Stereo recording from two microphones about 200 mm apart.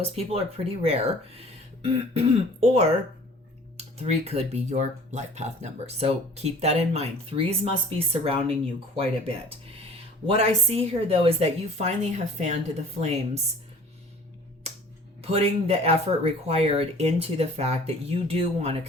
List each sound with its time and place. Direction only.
0.0 s speech: 30° right (ahead or behind)
3.9 s speech: 30° right (ahead or behind)
15.2 s speech: 30° right (ahead or behind)